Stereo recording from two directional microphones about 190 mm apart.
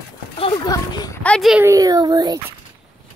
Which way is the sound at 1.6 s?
15° right (ahead or behind).